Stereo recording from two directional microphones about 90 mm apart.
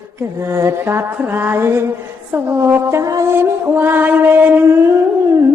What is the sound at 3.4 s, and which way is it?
Music, 25° right (ahead or behind).